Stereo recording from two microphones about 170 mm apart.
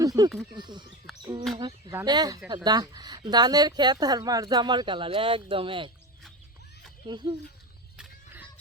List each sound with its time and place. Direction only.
0.0 s speech: 25° right (ahead or behind)
7.1 s speech: 25° right (ahead or behind)